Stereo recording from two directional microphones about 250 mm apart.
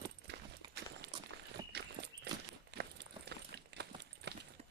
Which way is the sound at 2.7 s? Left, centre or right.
Right.